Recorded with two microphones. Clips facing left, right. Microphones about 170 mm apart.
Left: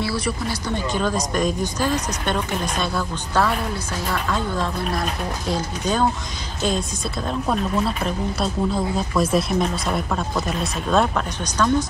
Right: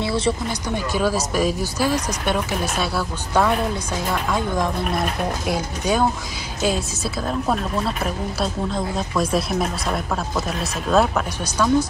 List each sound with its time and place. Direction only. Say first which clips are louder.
0.0 s speech: right 3 dB; 25° right (ahead or behind)
0.7 s speech: right 2 dB; 10° right (ahead or behind)